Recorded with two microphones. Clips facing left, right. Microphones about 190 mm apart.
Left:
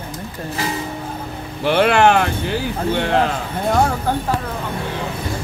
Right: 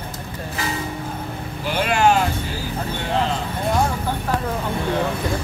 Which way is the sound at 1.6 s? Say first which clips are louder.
Left 5 dB; 65° left (ahead or behind).